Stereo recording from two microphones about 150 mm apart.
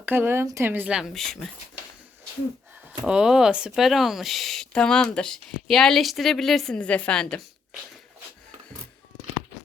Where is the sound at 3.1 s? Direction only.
5° right (ahead or behind).